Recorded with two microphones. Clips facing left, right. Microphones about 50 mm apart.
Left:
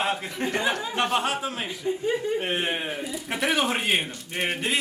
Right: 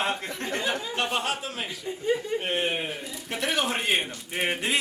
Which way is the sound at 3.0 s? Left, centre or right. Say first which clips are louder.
Left 4 dB; centre.